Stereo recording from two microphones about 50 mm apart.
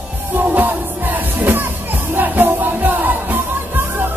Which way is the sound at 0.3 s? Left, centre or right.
Right.